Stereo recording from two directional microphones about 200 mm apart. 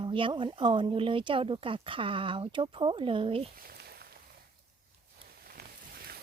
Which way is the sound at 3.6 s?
50° right (ahead or behind).